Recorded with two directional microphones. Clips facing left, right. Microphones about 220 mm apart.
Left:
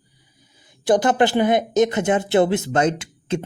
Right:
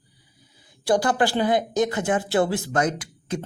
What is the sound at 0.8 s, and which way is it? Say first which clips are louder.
A man's voice: left 4 dB; 20° left (ahead or behind).